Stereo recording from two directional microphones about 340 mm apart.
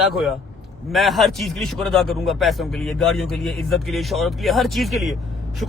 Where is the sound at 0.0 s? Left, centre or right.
Centre.